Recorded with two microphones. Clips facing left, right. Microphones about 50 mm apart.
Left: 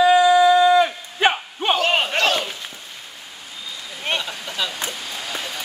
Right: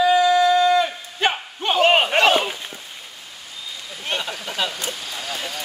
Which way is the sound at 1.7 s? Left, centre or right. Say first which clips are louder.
Right 6 dB; centre.